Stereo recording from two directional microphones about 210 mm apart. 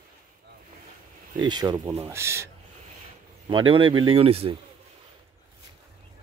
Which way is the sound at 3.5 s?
25° right (ahead or behind).